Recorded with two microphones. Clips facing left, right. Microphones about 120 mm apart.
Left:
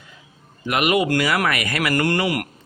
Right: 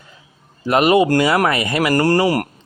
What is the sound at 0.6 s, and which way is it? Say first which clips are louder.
Speech: right 6 dB; 35° right (ahead or behind).